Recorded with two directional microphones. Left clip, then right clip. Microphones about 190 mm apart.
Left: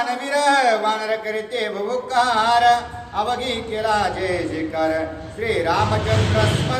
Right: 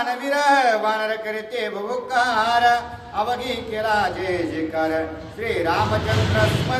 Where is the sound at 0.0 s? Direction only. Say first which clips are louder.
Left 1 dB; 15° right (ahead or behind).